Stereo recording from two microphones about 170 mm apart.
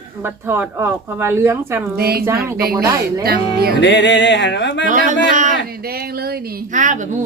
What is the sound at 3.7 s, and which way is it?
Music, 90° left.